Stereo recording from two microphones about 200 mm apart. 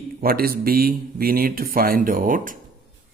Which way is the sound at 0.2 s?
50° right (ahead or behind).